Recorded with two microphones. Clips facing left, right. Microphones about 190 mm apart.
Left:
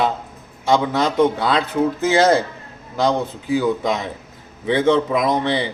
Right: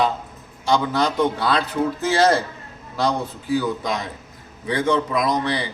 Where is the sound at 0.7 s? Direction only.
20° left (ahead or behind).